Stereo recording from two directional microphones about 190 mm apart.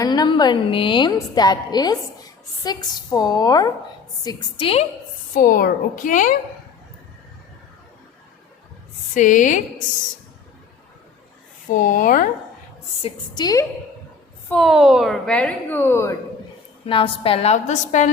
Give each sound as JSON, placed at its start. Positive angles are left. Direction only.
{"t": 0.0, "sound": "a woman's voice", "side_deg": 20}
{"t": 5.3, "sound": "a woman's voice", "side_deg": 45}
{"t": 9.1, "sound": "a woman's voice", "side_deg": 45}
{"t": 11.7, "sound": "a woman's voice", "side_deg": 45}
{"t": 13.0, "sound": "a woman's voice", "side_deg": 25}
{"t": 14.5, "sound": "a woman's voice", "side_deg": 0}
{"t": 16.8, "sound": "a woman's voice", "side_deg": 30}